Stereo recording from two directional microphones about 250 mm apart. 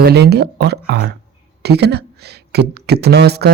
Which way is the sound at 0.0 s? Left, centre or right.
Right.